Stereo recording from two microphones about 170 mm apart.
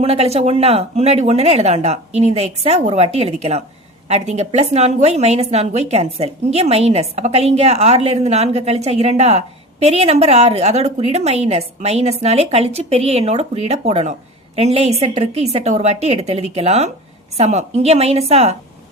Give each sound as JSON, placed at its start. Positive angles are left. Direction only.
{"t": 0.0, "sound": "a woman's voice", "side_deg": -35}